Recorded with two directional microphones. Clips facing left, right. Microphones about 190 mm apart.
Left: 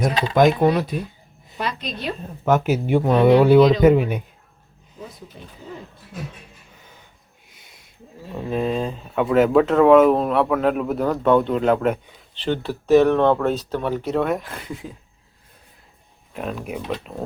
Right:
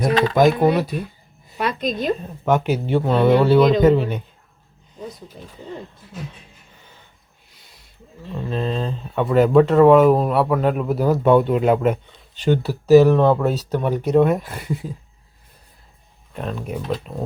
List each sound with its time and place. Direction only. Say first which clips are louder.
0.4 s speech: right 1 dB; 5° right (ahead or behind)
1.5 s a sound: right 5 dB; 50° right (ahead or behind)
2.6 s speech: left 1 dB; 10° left (ahead or behind)
5.4 s speech: right 2 dB; 40° right (ahead or behind)
8.2 s speech: left 1 dB; 5° left (ahead or behind)
13.7 s speech: right 3 dB; 15° right (ahead or behind)
16.3 s speech: right 1 dB; 5° left (ahead or behind)